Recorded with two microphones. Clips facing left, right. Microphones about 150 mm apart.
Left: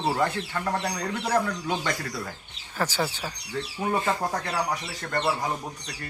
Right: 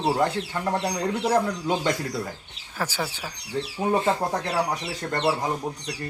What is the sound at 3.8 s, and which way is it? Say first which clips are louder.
Speech: right 3 dB; 25° right (ahead or behind).